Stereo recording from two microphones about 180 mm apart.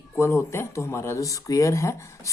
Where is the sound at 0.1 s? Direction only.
15° left (ahead or behind).